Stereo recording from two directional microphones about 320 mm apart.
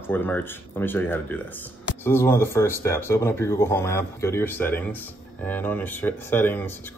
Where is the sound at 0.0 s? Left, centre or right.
Centre.